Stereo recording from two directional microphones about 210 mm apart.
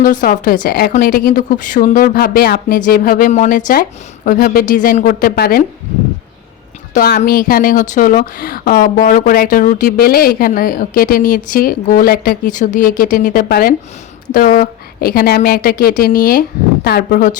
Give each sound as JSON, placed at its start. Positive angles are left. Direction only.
{"t": 0.0, "sound": "speech", "side_deg": 40}
{"t": 6.9, "sound": "speech", "side_deg": 45}